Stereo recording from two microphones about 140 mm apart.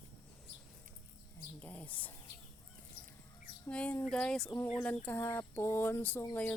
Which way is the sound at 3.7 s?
10° left (ahead or behind).